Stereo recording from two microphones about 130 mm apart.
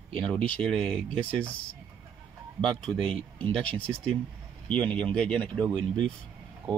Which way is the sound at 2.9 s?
45° right (ahead or behind).